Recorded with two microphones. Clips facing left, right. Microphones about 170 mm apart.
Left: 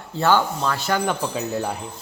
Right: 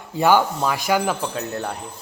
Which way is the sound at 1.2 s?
5° left (ahead or behind).